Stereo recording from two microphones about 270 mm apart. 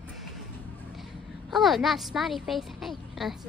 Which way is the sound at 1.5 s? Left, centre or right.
Centre.